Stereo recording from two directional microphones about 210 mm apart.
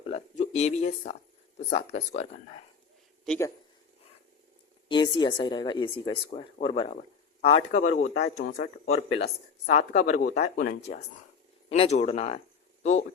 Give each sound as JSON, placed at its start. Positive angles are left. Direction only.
{"t": 0.0, "sound": "speech", "side_deg": 30}
{"t": 3.2, "sound": "speech", "side_deg": 10}
{"t": 4.9, "sound": "speech", "side_deg": 20}
{"t": 8.0, "sound": "speech", "side_deg": 55}
{"t": 9.1, "sound": "speech", "side_deg": 30}